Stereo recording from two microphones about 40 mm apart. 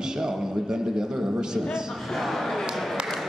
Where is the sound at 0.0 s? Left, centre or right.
Centre.